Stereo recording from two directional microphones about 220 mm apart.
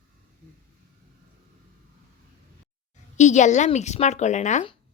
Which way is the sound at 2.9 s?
35° left (ahead or behind).